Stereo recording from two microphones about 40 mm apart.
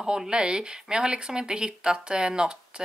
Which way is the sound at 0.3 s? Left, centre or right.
Right.